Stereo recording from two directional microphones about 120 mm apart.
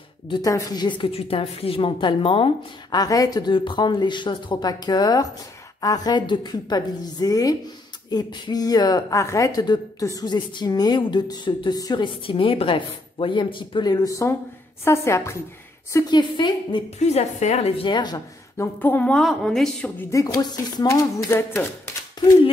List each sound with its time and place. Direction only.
0.3 s a woman's voice: 30° left (ahead or behind); by 3.0 s 45° left (ahead or behind)
3.0 s speech: 30° left (ahead or behind)
15.9 s speech: 35° left (ahead or behind)
17.0 s a woman's voice: 65° left (ahead or behind)
17.8 s speech: 35° left (ahead or behind)
18.6 s a woman's voice: 15° left (ahead or behind)
20.1 s speech: 25° left (ahead or behind)